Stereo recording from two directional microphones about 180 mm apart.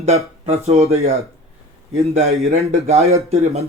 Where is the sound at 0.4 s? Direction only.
35° right (ahead or behind).